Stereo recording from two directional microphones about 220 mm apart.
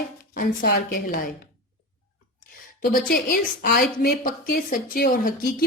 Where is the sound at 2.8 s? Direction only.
40° left (ahead or behind).